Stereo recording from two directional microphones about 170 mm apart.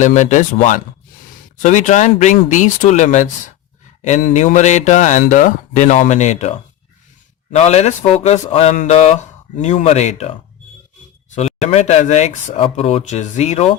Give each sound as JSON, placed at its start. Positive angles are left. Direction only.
{"t": 0.0, "sound": "speech", "side_deg": 45}
{"t": 7.5, "sound": "speech", "side_deg": 40}
{"t": 11.6, "sound": "speech", "side_deg": 40}